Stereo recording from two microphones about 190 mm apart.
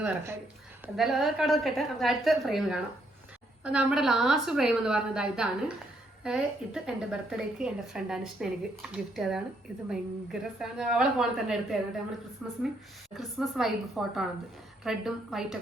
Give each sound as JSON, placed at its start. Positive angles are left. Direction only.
{"t": 0.9, "sound": "a woman's voice", "side_deg": 0}